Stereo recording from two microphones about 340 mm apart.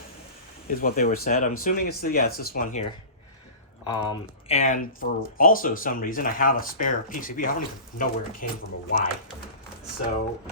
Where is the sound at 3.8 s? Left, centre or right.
Centre.